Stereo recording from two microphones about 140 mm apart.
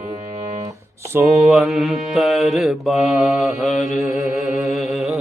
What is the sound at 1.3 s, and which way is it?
Mantra, centre (ahead or behind).